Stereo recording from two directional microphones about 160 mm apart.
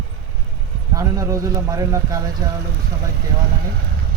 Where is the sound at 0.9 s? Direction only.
20° right (ahead or behind).